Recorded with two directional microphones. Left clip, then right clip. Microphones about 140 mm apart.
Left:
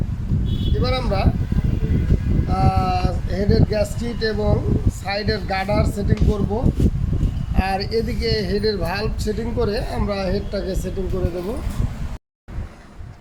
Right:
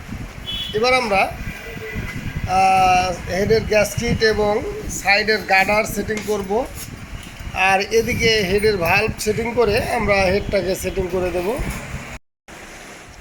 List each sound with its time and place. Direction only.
0.8 s speech: 5° right (ahead or behind)
2.5 s speech: centre (ahead or behind)